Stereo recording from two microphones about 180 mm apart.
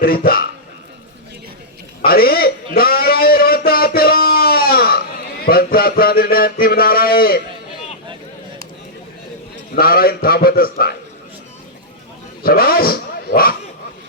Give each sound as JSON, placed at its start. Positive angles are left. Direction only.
{"t": 0.0, "sound": "a man's voice", "side_deg": 55}
{"t": 2.0, "sound": "a man's voice", "side_deg": 55}
{"t": 2.7, "sound": "a sound", "side_deg": 55}
{"t": 9.7, "sound": "a man's voice", "side_deg": 55}
{"t": 12.4, "sound": "speech", "side_deg": 55}